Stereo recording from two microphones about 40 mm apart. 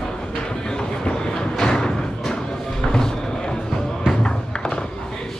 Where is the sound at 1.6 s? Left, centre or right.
Centre.